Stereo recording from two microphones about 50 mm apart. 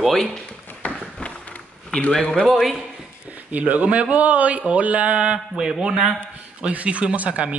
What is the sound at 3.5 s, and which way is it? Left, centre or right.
A man's voice, right.